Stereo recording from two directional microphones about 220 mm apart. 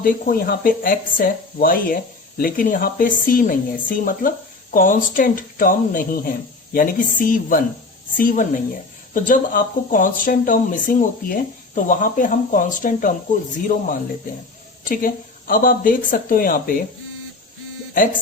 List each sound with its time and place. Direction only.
0.0 s speech: 40° left (ahead or behind)